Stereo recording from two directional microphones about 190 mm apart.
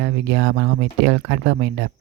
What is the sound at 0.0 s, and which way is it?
Speech, 60° right (ahead or behind).